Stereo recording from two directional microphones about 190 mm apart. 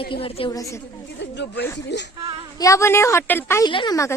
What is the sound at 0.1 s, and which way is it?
Speech, 30° left (ahead or behind).